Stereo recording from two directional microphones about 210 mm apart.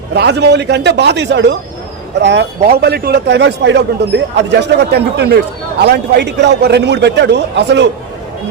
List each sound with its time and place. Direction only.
0.1 s a man's voice: 55° right (ahead or behind)